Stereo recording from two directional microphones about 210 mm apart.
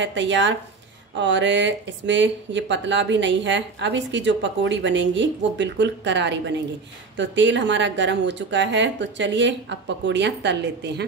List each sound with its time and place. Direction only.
0.0 s speech: 60° right (ahead or behind)